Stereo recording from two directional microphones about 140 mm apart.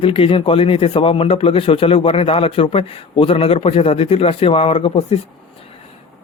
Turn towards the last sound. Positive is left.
turn(degrees=45)  # may be behind; listen again after turning